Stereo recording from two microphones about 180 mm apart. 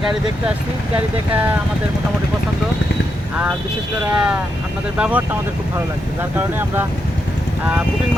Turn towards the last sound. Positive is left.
turn(degrees=-10)  # may be behind; listen again after turning